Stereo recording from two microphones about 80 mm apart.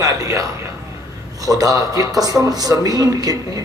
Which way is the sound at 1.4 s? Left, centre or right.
Right.